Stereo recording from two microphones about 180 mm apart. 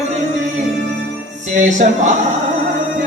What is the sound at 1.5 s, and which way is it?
Speech, 45° right (ahead or behind).